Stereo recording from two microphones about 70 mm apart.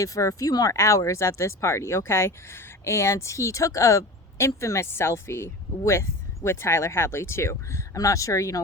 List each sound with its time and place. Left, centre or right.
0.0 s speech: left